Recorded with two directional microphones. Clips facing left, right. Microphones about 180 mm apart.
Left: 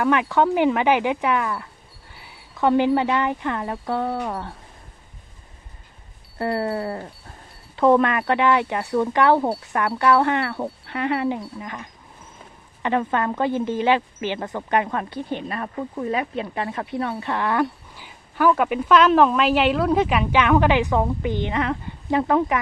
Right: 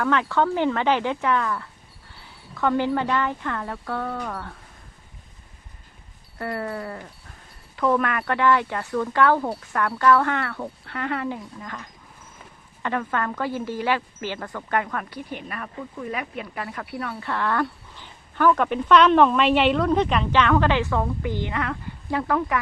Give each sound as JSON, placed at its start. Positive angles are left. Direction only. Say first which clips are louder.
{"t": 0.0, "sound": "speech", "louder": "left 3 dB", "side_deg": 15}
{"t": 6.4, "sound": "a sound", "louder": "left 5 dB", "side_deg": 30}
{"t": 7.8, "sound": "speech", "louder": "left 5 dB", "side_deg": 30}
{"t": 12.8, "sound": "speech", "louder": "left 4 dB", "side_deg": 20}